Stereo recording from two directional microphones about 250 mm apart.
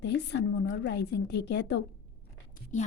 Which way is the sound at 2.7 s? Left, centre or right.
Left.